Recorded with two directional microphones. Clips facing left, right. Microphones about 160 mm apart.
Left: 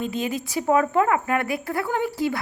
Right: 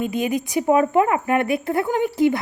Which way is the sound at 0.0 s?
15° right (ahead or behind).